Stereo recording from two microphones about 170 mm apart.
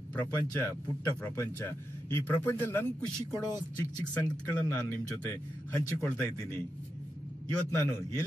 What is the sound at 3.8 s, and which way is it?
Speech, 20° left (ahead or behind).